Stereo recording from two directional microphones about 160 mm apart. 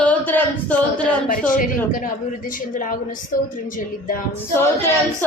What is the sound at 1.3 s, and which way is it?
Speech, 55° left (ahead or behind).